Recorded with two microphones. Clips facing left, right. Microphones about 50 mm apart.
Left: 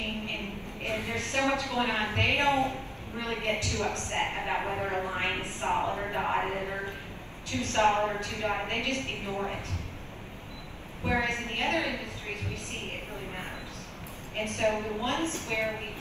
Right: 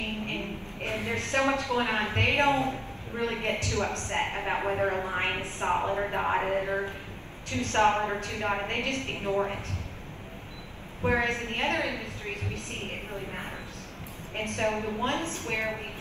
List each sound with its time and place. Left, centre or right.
0.3 s a woman's voice: right
4.6 s a man's voice: right
5.9 s a woman's voice: right
6.3 s a sound: right
6.6 s a woman's voice: right
11.1 s a woman's voice: right
14.3 s a woman's voice: right